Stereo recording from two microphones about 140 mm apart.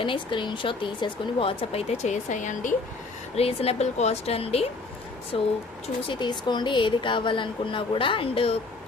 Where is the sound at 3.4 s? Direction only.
45° left (ahead or behind).